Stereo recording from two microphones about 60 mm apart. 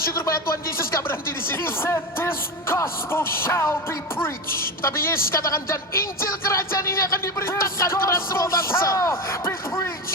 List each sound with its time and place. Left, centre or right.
1.0 s speech: left
4.8 s speech: left
6.5 s music: left